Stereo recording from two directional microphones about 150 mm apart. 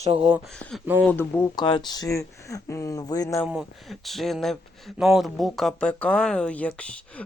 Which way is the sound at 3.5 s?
5° right (ahead or behind).